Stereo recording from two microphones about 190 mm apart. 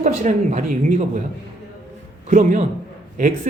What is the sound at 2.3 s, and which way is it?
A man's voice, 40° right (ahead or behind).